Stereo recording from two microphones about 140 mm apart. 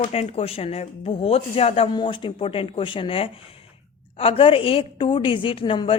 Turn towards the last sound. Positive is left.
turn(degrees=40)  # may be behind; listen again after turning